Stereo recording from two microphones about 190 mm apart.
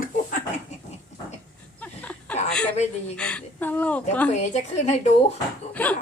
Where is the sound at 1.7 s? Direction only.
10° left (ahead or behind).